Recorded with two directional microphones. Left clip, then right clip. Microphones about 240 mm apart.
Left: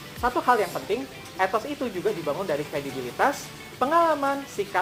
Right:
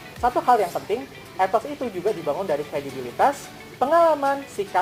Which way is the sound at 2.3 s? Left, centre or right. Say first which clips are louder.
Right 3 dB; left.